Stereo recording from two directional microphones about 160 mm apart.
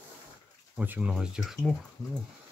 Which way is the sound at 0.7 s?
10° right (ahead or behind).